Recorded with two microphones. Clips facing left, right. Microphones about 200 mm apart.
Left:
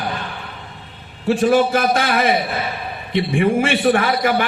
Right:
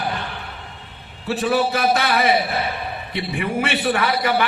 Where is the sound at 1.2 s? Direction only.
45° left (ahead or behind).